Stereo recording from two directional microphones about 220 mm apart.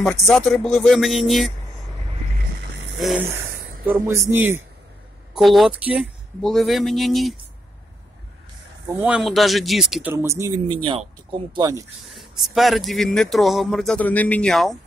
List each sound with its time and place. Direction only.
0.1 s speech: 5° left (ahead or behind)
3.0 s speech: 5° right (ahead or behind)
9.0 s speech: centre (ahead or behind)
10.1 s speech: 10° right (ahead or behind)
12.1 s speech: centre (ahead or behind)